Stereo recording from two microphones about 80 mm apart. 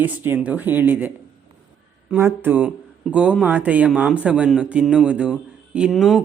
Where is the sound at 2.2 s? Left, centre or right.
Right; by 6.2 s centre.